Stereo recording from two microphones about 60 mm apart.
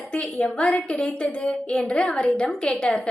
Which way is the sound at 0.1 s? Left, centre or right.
Centre.